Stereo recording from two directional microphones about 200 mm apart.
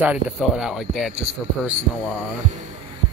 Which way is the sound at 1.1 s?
30° right (ahead or behind).